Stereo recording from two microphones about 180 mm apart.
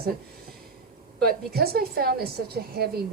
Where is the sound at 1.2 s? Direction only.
60° right (ahead or behind).